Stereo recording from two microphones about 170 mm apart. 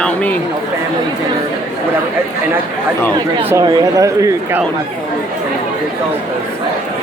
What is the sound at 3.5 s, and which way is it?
Speech, 20° right (ahead or behind).